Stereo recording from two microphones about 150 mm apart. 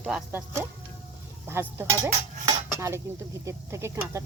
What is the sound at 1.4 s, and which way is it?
Speech, 15° right (ahead or behind).